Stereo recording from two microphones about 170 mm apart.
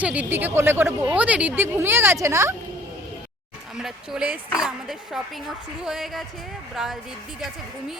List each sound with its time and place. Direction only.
0.0 s speech: 10° right (ahead or behind)
3.8 s speech: 5° right (ahead or behind)